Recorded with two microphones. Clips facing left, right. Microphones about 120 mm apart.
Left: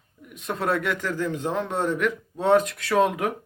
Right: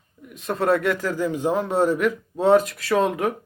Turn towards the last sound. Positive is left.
turn(degrees=0)  # may be behind; listen again after turning